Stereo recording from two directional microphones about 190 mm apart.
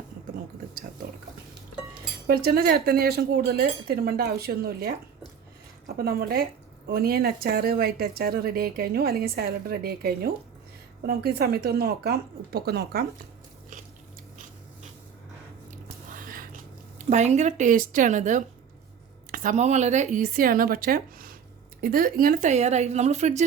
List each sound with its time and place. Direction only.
2.2 s speech: 55° right (ahead or behind)
6.0 s speech: 55° right (ahead or behind)
15.7 s squish: 45° right (ahead or behind)
17.1 s speech: 35° right (ahead or behind)